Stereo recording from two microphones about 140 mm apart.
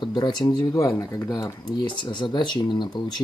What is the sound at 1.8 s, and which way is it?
Speech, 35° left (ahead or behind).